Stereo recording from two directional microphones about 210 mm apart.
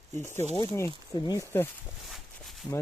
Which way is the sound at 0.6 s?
15° left (ahead or behind).